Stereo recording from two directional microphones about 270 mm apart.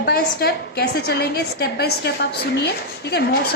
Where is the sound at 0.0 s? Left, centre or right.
Left.